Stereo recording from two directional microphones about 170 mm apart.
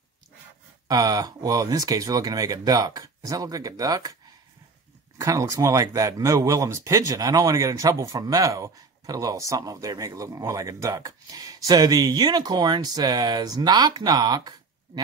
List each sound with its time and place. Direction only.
0.8 s speech: 20° right (ahead or behind)